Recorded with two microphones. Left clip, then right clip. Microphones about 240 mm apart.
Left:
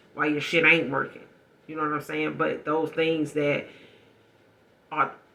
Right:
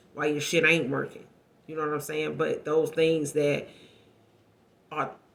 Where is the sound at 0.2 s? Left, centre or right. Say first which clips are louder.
Left 2 dB; right.